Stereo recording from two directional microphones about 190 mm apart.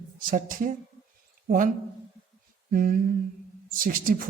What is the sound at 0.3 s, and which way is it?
Speech, 45° right (ahead or behind).